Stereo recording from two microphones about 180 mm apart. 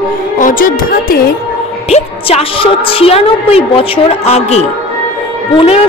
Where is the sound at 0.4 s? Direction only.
50° left (ahead or behind).